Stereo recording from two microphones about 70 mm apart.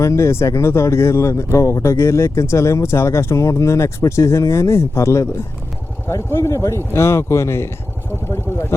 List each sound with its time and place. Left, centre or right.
0.0 s speech: left
8.3 s vehicle: left